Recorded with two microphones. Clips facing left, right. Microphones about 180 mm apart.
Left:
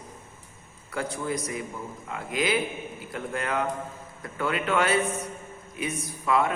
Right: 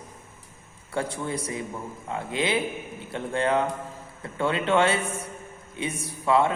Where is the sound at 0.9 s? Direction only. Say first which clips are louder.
Right 1 dB; 30° right (ahead or behind).